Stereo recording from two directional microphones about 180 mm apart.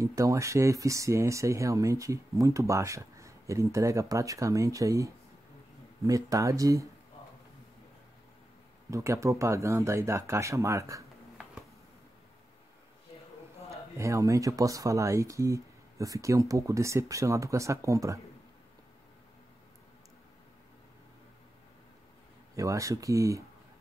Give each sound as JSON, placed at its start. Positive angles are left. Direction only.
{"t": 0.0, "sound": "speech", "side_deg": -15}
{"t": 8.9, "sound": "speech", "side_deg": -15}
{"t": 13.9, "sound": "speech", "side_deg": -15}
{"t": 22.6, "sound": "speech", "side_deg": -15}